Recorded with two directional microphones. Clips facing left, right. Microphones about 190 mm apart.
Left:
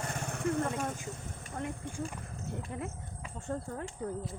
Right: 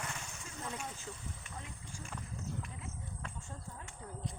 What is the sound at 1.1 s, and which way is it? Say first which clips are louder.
Speech: left 5 dB; 45° left (ahead or behind).